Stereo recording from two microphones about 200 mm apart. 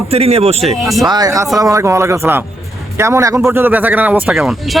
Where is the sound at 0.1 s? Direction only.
30° right (ahead or behind).